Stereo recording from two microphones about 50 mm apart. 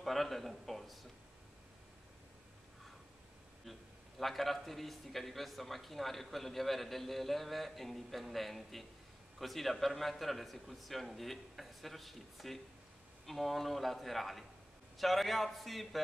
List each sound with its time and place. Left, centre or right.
0.0 s a man's voice: centre
4.2 s a man's voice: centre